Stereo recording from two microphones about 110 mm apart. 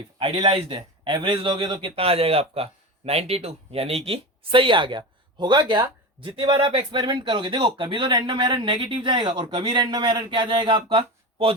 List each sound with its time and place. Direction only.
0.2 s speech: 60° right (ahead or behind)
2.0 s speech: 60° right (ahead or behind)